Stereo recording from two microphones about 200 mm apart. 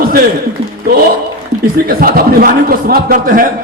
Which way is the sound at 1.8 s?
45° right (ahead or behind).